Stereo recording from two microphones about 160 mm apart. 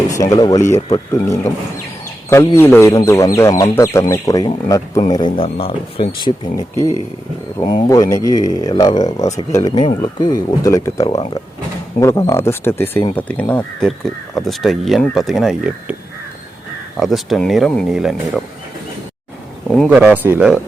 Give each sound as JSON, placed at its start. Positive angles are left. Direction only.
{"t": 0.1, "sound": "speech", "side_deg": 20}
{"t": 17.0, "sound": "speech", "side_deg": 0}
{"t": 19.9, "sound": "speech", "side_deg": -10}